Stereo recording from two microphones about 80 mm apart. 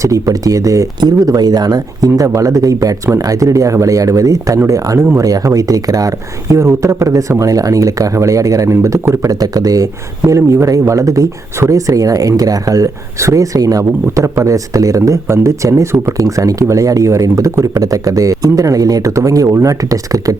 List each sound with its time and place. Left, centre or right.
0.0 s speech: right
0.9 s speech: right